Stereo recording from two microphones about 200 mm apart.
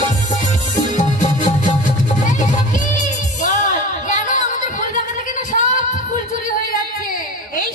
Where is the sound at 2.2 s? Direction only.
40° left (ahead or behind).